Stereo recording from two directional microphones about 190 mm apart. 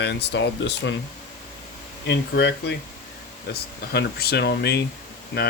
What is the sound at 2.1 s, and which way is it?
Speech, 65° left (ahead or behind).